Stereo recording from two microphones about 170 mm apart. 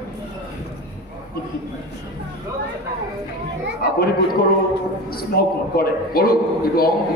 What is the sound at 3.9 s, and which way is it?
Speech, 60° left (ahead or behind).